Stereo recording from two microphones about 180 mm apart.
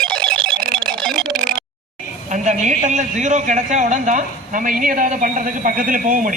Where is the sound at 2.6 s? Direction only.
45° right (ahead or behind).